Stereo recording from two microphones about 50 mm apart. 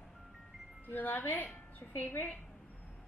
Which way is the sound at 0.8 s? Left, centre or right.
Left.